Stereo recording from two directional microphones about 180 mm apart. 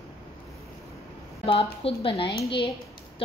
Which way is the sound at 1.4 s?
30° left (ahead or behind).